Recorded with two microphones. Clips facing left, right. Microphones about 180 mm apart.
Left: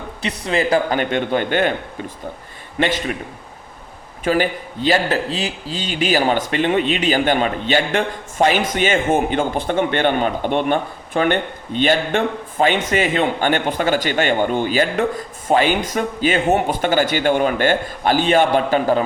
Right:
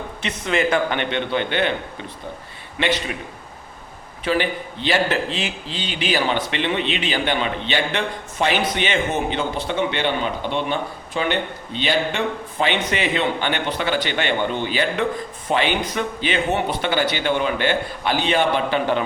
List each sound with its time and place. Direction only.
0.2 s a man's voice: 35° left (ahead or behind)
2.7 s a man's voice: 45° left (ahead or behind)
4.2 s a man's voice: 45° left (ahead or behind)